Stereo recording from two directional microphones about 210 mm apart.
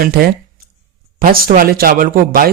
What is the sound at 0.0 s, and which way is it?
Speech, 45° right (ahead or behind).